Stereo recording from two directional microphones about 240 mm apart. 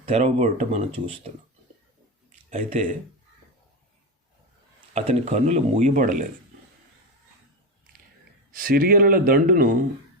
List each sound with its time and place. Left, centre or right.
0.0 s speech: right
2.5 s speech: right
4.9 s speech: right
8.5 s speech: right